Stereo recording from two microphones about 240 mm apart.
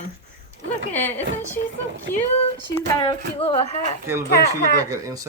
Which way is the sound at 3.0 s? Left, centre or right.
Left.